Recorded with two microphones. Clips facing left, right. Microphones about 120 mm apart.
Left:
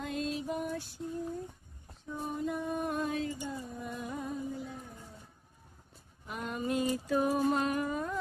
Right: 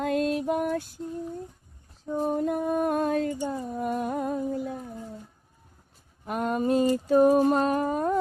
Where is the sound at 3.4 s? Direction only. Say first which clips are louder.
Right 10 dB; 65° right (ahead or behind).